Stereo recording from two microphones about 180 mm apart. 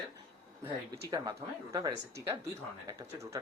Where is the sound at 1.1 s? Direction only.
20° right (ahead or behind).